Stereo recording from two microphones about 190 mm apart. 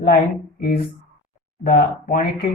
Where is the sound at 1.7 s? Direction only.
50° left (ahead or behind).